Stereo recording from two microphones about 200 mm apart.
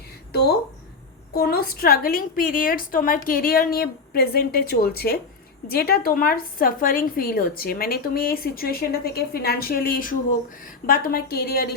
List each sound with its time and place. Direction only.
1.4 s a woman's voice: 50° left (ahead or behind)